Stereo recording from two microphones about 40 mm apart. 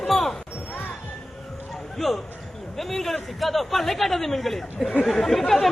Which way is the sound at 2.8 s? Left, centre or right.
Centre.